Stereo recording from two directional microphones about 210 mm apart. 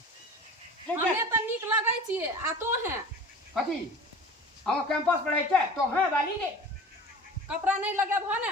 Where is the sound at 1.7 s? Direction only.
10° right (ahead or behind).